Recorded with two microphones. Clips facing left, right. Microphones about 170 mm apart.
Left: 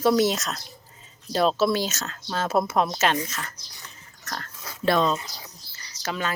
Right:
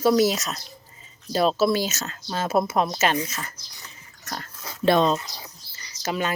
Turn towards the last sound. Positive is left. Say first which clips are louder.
# right 3 dB
turn(degrees=-15)  # may be behind; listen again after turning